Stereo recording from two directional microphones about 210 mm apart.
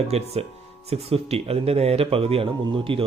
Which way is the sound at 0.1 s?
30° right (ahead or behind).